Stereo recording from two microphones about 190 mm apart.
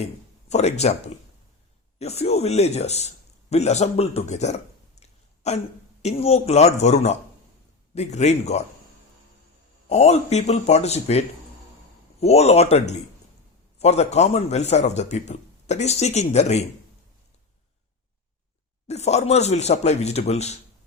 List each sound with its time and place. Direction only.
0.0 s a man's voice: 35° left (ahead or behind)
9.9 s a man's voice: 35° left (ahead or behind)
18.9 s a man's voice: 35° left (ahead or behind)